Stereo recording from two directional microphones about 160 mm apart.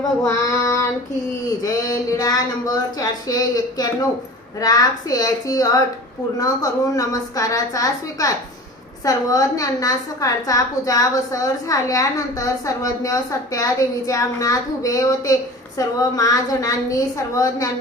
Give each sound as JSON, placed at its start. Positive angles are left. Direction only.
{"t": 0.3, "sound": "child singing", "side_deg": 20}
{"t": 1.6, "sound": "a woman's voice", "side_deg": 25}